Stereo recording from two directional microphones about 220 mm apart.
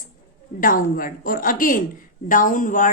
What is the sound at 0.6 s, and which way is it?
Speech, 40° left (ahead or behind).